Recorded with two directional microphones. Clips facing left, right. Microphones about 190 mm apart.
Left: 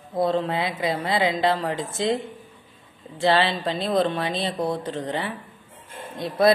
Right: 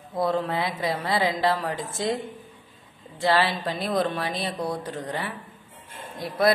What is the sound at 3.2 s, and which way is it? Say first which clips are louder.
Speech: left 2 dB; 25° left (ahead or behind).